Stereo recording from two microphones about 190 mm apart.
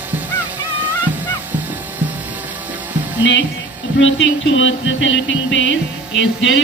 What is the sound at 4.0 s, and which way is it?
Music, 80° left.